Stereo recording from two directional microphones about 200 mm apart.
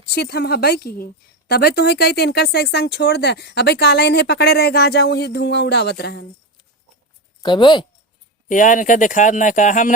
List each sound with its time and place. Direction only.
0.1 s a woman's voice: 50° left (ahead or behind)
7.4 s speech: 25° left (ahead or behind)
8.4 s speech: 40° left (ahead or behind)